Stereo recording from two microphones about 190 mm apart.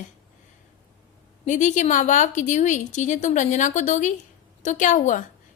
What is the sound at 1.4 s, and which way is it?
A woman's voice, 40° left (ahead or behind).